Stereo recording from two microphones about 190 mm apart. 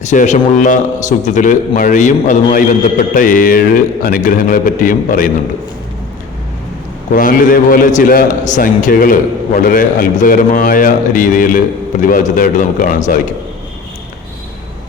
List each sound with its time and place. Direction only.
0.0 s a man's voice: 40° left (ahead or behind)
7.1 s a man's voice: 45° left (ahead or behind)